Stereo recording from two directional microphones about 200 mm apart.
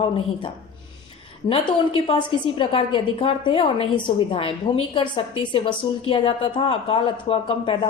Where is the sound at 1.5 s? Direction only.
30° left (ahead or behind).